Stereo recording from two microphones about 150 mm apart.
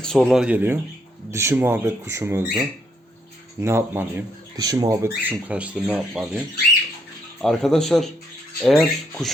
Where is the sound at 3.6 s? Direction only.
15° right (ahead or behind).